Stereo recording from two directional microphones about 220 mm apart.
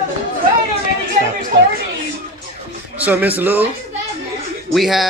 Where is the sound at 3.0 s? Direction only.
5° right (ahead or behind).